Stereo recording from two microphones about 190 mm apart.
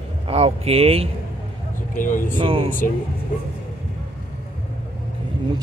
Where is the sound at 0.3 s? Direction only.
30° right (ahead or behind).